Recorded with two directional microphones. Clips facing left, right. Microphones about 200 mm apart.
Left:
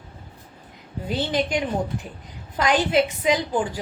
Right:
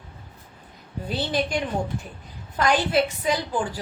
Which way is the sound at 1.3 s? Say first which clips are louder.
Left 1 dB; 20° left (ahead or behind).